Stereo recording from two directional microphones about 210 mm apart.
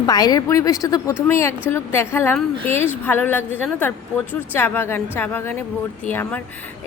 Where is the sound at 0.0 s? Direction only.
20° left (ahead or behind).